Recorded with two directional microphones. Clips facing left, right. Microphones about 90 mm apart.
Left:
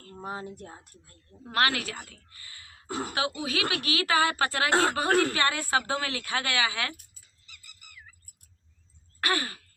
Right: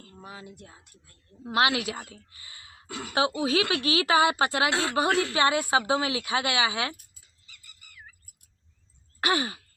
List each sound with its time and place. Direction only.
0.1 s speech: 40° left (ahead or behind)
1.5 s a woman's voice: 15° right (ahead or behind)
2.8 s speech: 40° left (ahead or behind)
3.2 s a woman's voice: 25° right (ahead or behind)
4.7 s speech: 45° left (ahead or behind)
5.3 s a woman's voice: 20° right (ahead or behind)
9.2 s a woman's voice: 20° right (ahead or behind)